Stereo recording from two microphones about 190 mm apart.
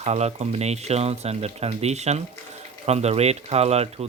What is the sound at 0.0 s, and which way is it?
Speech, 35° right (ahead or behind).